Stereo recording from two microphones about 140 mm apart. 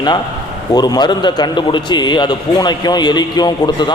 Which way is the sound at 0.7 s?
30° left (ahead or behind).